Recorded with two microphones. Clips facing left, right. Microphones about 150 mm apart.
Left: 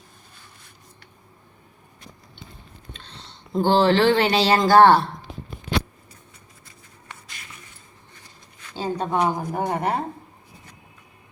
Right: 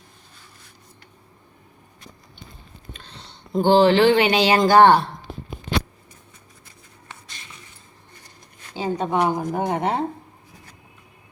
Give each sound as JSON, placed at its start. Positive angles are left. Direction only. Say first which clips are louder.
{"t": 3.6, "sound": "speech", "louder": "right 3 dB", "side_deg": -15}
{"t": 8.7, "sound": "speech", "louder": "right 2 dB", "side_deg": -15}